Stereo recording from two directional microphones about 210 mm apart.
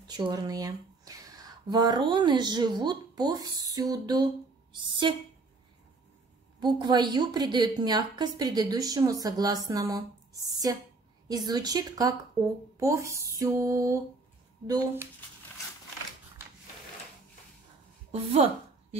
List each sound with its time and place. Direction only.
0.1 s a woman's voice: 20° right (ahead or behind)
6.6 s a woman's voice: 20° right (ahead or behind)
12.7 s a sound: 15° right (ahead or behind)
18.1 s speech: 30° right (ahead or behind)